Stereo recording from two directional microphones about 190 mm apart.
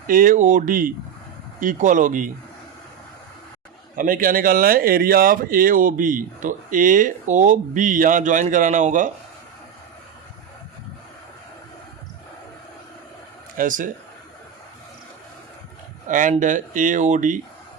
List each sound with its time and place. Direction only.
0.1 s speech: 45° right (ahead or behind)
3.9 s speech: 45° right (ahead or behind)
13.6 s speech: 45° right (ahead or behind)
16.0 s speech: 45° right (ahead or behind)